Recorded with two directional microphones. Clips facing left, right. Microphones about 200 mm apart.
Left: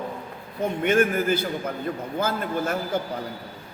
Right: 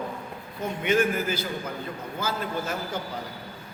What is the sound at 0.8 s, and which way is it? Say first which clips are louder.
Speech: left 3 dB; 50° left (ahead or behind).